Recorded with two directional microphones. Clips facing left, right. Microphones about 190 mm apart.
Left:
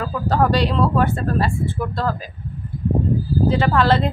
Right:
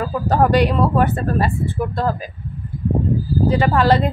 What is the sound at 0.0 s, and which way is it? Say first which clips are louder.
Speech: right 2 dB; 15° right (ahead or behind).